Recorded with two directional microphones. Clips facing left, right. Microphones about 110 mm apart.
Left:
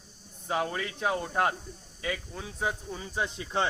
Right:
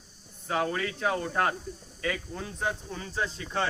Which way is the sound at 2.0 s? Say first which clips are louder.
Right 2 dB; 5° left (ahead or behind).